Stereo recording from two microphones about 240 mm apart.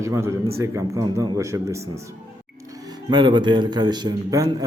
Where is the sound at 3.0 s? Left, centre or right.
Centre.